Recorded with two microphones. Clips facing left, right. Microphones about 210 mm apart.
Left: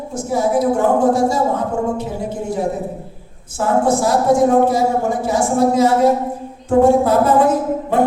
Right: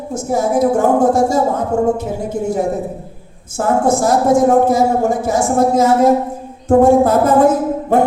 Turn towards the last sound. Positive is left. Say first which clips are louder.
# right 3 dB
turn(degrees=-45)  # may be behind; listen again after turning